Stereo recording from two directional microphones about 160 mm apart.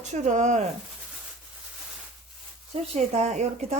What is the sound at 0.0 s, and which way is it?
Speech, 45° right (ahead or behind).